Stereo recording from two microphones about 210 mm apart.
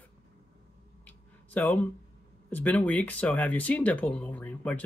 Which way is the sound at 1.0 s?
10° left (ahead or behind).